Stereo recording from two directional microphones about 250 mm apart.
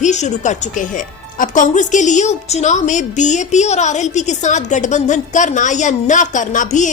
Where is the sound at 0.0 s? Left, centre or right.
Left.